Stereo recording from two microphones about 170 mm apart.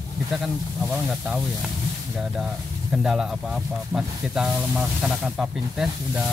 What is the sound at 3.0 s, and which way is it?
Speech, 5° right (ahead or behind).